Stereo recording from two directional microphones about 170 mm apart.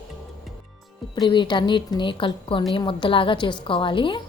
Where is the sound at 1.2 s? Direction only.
25° left (ahead or behind).